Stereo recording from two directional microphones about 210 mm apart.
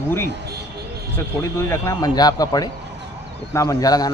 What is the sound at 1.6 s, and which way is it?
A man's voice, 15° left (ahead or behind).